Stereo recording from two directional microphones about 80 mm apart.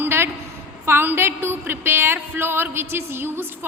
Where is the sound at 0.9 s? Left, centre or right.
Right.